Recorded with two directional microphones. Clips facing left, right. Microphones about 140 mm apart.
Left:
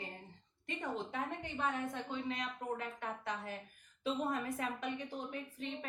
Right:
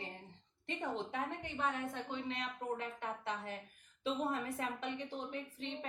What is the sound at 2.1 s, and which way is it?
Speech, 30° right (ahead or behind).